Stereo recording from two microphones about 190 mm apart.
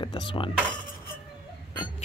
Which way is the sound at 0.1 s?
20° left (ahead or behind).